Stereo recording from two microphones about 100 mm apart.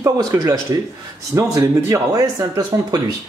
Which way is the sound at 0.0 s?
35° right (ahead or behind).